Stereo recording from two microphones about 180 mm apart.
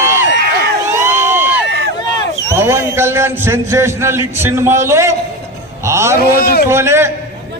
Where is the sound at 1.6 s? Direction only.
65° right (ahead or behind).